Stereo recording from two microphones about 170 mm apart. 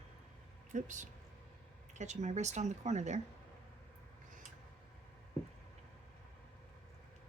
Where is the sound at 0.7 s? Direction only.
45° right (ahead or behind).